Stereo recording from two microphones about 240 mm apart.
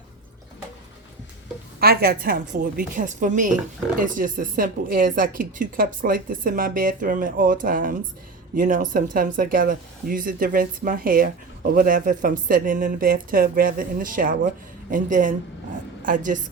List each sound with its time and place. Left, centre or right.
1.8 s speech: right